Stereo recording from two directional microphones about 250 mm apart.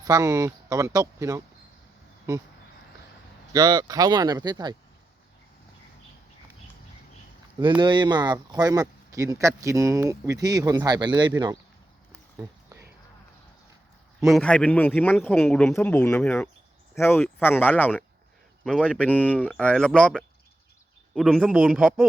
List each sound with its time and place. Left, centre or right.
0.0 s speech: centre
3.5 s speech: centre
7.8 s speech: centre
14.3 s a man's voice: centre